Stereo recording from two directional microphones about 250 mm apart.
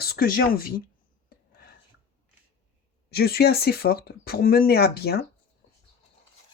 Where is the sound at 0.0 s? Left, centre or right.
Left.